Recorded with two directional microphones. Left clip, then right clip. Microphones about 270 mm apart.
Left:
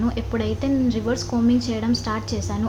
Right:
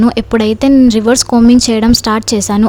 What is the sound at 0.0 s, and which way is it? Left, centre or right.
A woman's voice, right.